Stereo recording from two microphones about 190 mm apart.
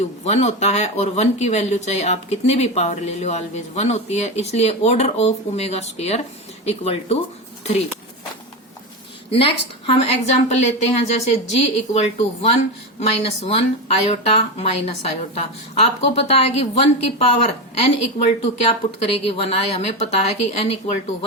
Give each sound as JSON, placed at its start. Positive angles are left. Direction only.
{"t": 0.0, "sound": "speech", "side_deg": 35}
{"t": 9.3, "sound": "speech", "side_deg": 30}